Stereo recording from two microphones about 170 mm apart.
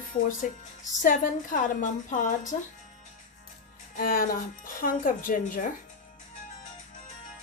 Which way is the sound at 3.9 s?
55° left (ahead or behind).